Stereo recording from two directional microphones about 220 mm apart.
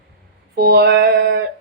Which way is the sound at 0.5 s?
45° right (ahead or behind).